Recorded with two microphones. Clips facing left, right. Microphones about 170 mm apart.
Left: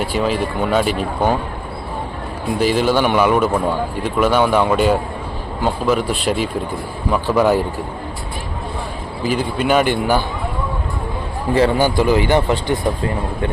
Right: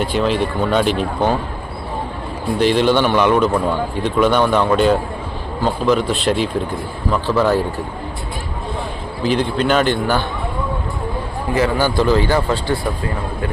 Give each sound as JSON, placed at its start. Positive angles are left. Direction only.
{"t": 0.0, "sound": "speech", "side_deg": 5}
{"t": 2.6, "sound": "a man's voice", "side_deg": 5}
{"t": 9.2, "sound": "a man's voice", "side_deg": 5}
{"t": 11.8, "sound": "a man's voice", "side_deg": 15}